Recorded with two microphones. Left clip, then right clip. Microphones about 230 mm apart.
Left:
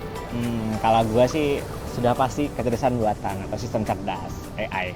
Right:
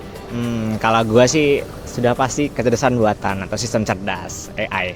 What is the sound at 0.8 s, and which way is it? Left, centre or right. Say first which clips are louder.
Speech: right 5 dB; right.